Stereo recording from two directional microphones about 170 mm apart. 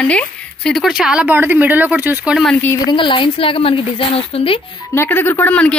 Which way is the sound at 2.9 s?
30° left (ahead or behind).